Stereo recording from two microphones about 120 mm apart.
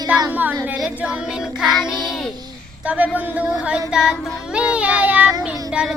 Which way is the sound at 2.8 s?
10° right (ahead or behind).